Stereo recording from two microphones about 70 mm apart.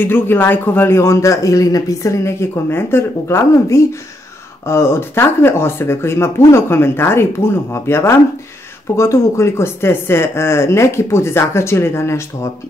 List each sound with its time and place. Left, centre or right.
0.0 s speech: left
2.7 s speech: left